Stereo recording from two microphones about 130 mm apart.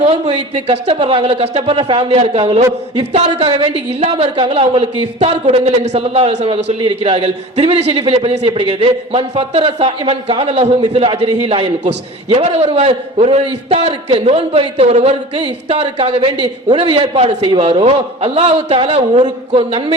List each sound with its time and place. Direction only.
0.0 s speech: 55° right (ahead or behind)
0.7 s a woman's voice: 45° right (ahead or behind)
15.4 s a woman's voice: 45° right (ahead or behind)